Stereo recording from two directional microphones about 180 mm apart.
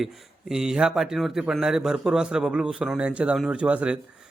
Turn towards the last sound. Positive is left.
turn(degrees=-5)  # may be behind; listen again after turning